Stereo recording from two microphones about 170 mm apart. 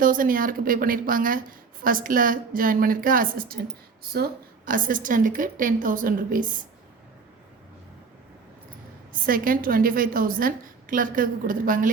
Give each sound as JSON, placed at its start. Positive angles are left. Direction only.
{"t": 0.0, "sound": "a woman's voice", "side_deg": -55}
{"t": 9.2, "sound": "a woman's voice", "side_deg": -55}